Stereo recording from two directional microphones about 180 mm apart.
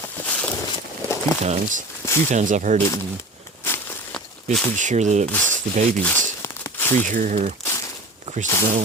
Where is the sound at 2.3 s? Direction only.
45° right (ahead or behind).